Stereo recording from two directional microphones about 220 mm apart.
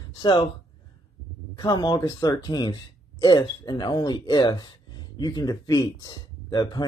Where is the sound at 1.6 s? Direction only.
20° left (ahead or behind).